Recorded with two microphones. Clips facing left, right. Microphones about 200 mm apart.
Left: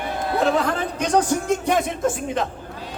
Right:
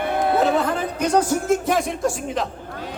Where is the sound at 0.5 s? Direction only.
5° right (ahead or behind).